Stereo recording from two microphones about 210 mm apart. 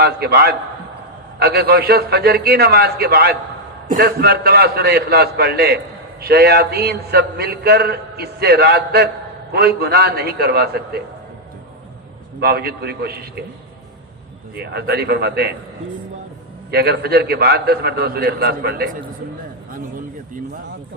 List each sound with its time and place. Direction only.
0.0 s a man's voice: 50° right (ahead or behind)
12.4 s a man's voice: 45° right (ahead or behind)
14.5 s a man's voice: 50° right (ahead or behind)
16.7 s a man's voice: 50° right (ahead or behind)